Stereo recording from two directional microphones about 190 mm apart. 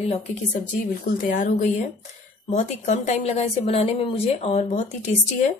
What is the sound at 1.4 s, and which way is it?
A woman's voice, 40° left (ahead or behind).